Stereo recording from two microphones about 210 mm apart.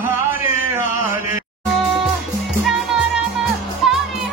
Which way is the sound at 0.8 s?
40° left (ahead or behind).